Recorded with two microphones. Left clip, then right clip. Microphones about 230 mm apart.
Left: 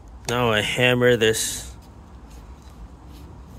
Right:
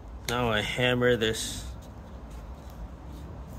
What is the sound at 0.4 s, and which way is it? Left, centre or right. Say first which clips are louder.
Speech: left 7 dB; left.